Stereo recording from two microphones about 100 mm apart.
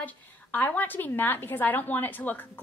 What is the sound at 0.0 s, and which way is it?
A woman's voice, 15° left (ahead or behind).